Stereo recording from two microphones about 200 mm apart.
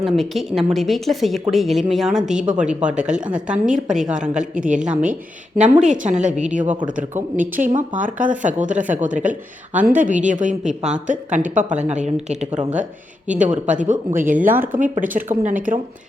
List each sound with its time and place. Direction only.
0.0 s speech: centre (ahead or behind)
2.4 s a woman's voice: 35° right (ahead or behind)
3.0 s speech: 5° right (ahead or behind)
4.5 s a woman's voice: 40° right (ahead or behind)
4.8 s speech: 5° right (ahead or behind)
5.8 s a woman's voice: 35° right (ahead or behind)
14.3 s a woman's voice: 10° right (ahead or behind)
15.0 s speech: 40° right (ahead or behind)